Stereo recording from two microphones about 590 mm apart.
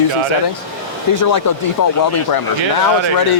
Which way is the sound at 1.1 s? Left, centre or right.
Left.